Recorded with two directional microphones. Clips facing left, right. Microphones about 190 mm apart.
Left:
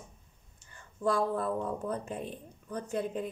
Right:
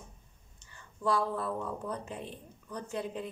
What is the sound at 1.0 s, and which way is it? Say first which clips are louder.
A woman's voice: left 2 dB; 50° left (ahead or behind).